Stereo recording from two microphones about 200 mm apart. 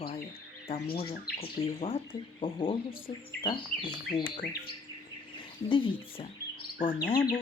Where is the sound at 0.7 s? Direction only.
30° left (ahead or behind).